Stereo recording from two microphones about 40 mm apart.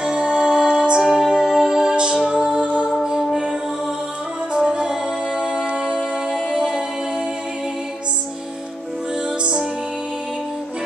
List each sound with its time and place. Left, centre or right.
0.0 s music: right
3.0 s music: centre
4.6 s music: right
6.3 s music: centre
9.4 s music: right